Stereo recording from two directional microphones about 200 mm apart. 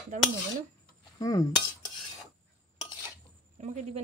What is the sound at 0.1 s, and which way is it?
Speech, 40° right (ahead or behind).